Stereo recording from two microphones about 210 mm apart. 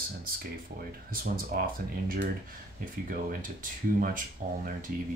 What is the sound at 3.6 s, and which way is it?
Speech, 40° right (ahead or behind).